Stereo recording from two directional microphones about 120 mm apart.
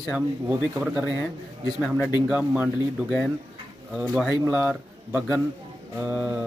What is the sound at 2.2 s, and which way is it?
Speech, 10° right (ahead or behind).